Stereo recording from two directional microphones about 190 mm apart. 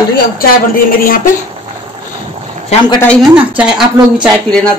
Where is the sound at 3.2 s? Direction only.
5° right (ahead or behind).